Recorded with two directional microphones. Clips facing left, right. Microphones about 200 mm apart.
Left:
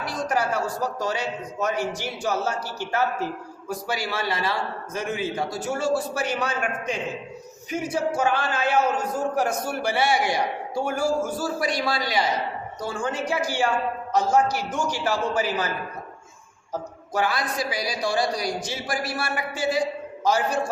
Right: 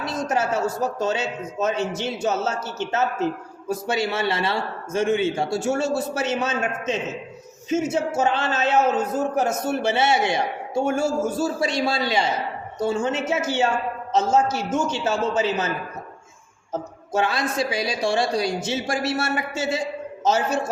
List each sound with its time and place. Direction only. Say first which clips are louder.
0.0 s a man's voice: right 2 dB; 25° right (ahead or behind)
16.7 s a man's voice: right 3 dB; 25° right (ahead or behind)